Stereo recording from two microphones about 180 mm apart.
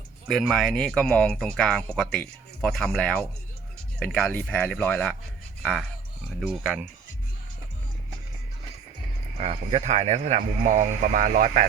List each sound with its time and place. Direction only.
0.3 s speech: centre (ahead or behind)
6.4 s speech: centre (ahead or behind)
9.4 s a man's voice: 35° right (ahead or behind)